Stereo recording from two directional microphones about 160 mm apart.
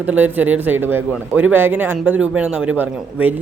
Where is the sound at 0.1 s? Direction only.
10° right (ahead or behind).